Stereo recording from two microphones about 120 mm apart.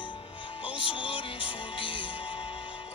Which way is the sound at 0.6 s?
45° left (ahead or behind).